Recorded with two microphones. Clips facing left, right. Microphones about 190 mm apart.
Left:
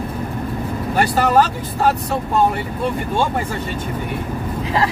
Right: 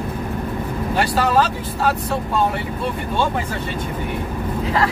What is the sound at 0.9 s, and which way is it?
Speech, 50° left (ahead or behind).